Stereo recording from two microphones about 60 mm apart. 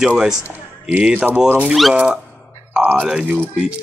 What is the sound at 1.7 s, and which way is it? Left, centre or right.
Speech, centre.